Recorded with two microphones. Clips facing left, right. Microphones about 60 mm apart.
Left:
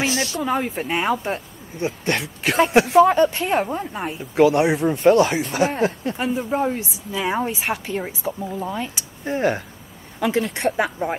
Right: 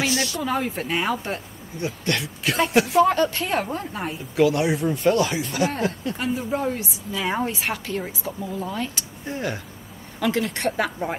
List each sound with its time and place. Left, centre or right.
0.0 s snake: left
0.4 s speech: centre
1.8 s speech: left
3.0 s speech: centre
3.6 s speech: centre
4.4 s speech: left
6.1 s speech: centre
9.2 s speech: left
10.5 s speech: centre